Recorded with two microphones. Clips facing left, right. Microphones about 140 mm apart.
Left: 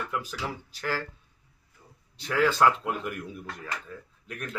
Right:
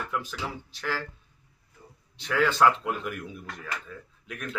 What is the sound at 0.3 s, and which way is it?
Speech, 40° left (ahead or behind).